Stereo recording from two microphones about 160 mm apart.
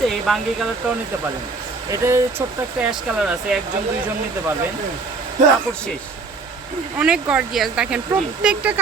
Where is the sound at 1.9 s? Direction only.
15° right (ahead or behind).